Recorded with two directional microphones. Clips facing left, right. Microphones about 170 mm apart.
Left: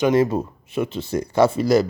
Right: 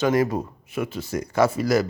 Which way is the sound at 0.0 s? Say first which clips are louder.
Left 3 dB; 25° left (ahead or behind).